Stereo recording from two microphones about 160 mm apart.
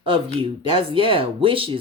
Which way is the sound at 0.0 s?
35° right (ahead or behind).